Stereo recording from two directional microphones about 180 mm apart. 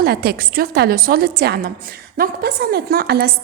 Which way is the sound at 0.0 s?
60° right (ahead or behind).